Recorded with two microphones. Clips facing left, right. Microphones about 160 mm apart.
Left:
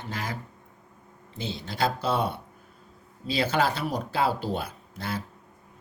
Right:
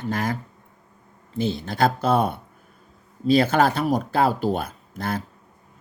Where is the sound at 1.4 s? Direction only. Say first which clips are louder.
Right 7 dB; 50° right (ahead or behind).